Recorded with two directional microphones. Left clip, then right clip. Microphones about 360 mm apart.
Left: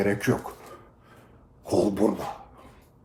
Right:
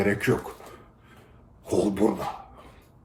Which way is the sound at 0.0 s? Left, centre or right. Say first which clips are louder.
Right 1 dB; centre.